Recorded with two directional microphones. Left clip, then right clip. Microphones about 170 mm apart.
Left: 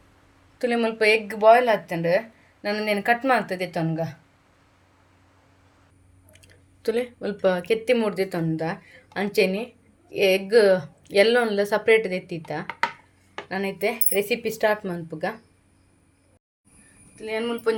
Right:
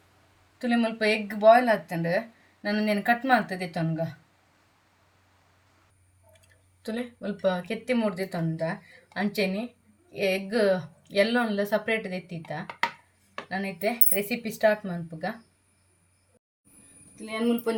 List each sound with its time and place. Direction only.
0.6 s speech: 55° left (ahead or behind)
6.3 s speech: 55° left (ahead or behind)
17.2 s speech: 90° left